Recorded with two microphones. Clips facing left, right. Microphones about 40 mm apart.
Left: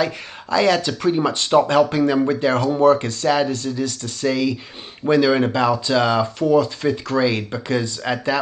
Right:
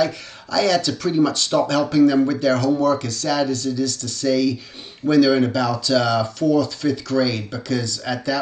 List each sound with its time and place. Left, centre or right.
0.0 s speech: left